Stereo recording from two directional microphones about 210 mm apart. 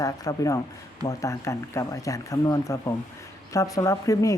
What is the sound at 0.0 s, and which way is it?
Speech, 15° left (ahead or behind).